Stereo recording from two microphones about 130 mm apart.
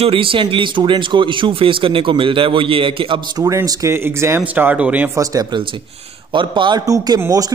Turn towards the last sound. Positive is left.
turn(degrees=-30)  # may be behind; listen again after turning